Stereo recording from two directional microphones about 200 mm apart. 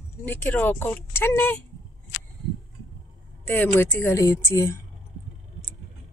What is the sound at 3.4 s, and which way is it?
Speech, 10° left (ahead or behind).